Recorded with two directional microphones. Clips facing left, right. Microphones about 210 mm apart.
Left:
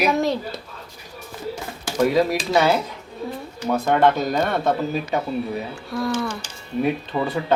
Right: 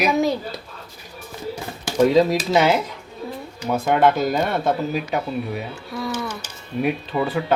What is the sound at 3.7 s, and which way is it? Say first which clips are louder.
Speech: even; 10° right (ahead or behind).